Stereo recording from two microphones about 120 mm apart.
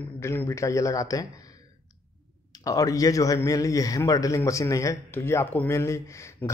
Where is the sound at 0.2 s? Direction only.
20° left (ahead or behind).